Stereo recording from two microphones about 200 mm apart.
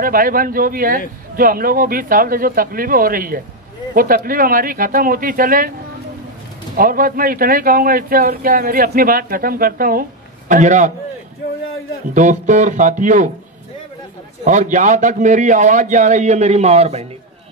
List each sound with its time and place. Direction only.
0.0 s speech: 45° right (ahead or behind)
6.8 s a man's voice: 45° right (ahead or behind)
12.1 s a man's voice: 40° right (ahead or behind)
14.4 s a man's voice: 40° right (ahead or behind)